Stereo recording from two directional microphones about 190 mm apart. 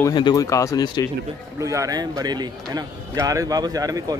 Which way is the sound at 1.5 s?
15° right (ahead or behind).